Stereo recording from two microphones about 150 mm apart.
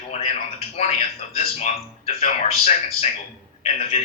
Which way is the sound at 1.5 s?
45° left (ahead or behind).